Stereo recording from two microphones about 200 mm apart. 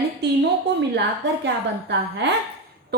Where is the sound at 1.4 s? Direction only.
60° right (ahead or behind).